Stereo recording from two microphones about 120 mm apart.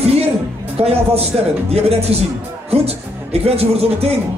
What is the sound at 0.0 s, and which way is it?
Music, 55° right (ahead or behind).